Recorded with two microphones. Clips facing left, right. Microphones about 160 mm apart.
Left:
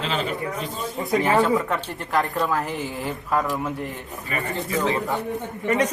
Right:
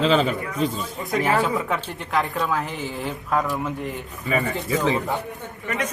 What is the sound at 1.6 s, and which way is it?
Speech, centre (ahead or behind).